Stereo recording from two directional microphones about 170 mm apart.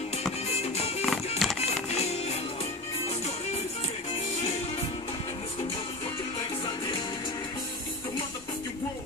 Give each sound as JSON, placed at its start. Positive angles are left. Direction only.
{"t": 0.7, "sound": "music", "side_deg": 40}
{"t": 1.4, "sound": "music", "side_deg": 0}
{"t": 1.9, "sound": "music", "side_deg": 40}